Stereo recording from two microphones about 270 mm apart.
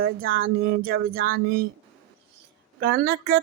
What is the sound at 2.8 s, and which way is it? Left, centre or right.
Speech, right.